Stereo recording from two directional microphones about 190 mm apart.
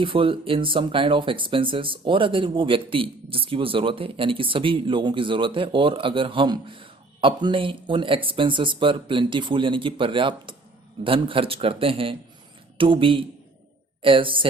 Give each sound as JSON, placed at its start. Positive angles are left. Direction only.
{"t": 0.0, "sound": "speech", "side_deg": -25}